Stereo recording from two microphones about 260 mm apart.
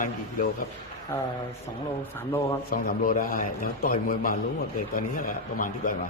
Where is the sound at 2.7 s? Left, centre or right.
Left.